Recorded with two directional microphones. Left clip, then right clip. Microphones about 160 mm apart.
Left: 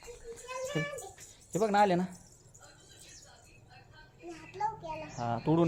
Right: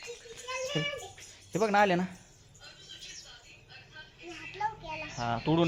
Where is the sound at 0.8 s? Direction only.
15° right (ahead or behind).